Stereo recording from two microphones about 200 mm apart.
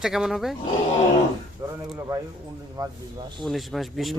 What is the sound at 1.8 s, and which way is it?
Speech, 10° right (ahead or behind).